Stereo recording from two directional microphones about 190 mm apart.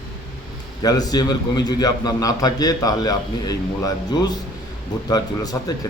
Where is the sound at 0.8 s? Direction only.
20° left (ahead or behind).